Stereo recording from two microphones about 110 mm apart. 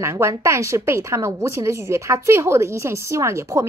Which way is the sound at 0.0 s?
25° right (ahead or behind).